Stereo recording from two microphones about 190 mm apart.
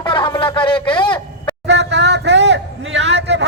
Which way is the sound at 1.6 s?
65° right (ahead or behind).